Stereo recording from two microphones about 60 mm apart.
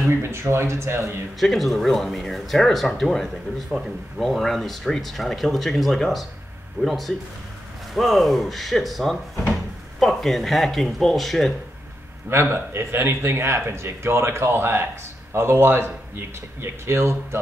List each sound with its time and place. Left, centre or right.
0.1 s speech: right
1.4 s speech: centre
12.3 s speech: right